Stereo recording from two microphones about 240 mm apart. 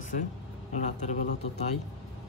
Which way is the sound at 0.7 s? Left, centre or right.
Left.